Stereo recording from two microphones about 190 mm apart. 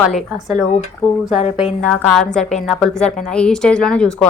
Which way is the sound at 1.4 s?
30° left (ahead or behind).